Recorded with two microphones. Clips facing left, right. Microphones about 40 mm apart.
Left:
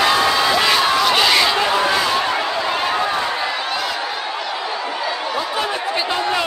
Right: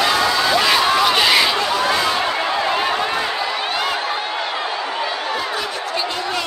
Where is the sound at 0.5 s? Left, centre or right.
Centre.